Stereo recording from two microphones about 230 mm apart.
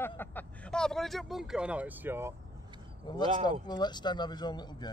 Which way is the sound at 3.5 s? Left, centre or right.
Centre.